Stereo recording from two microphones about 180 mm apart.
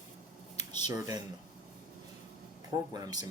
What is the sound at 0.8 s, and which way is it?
Speech, 20° right (ahead or behind).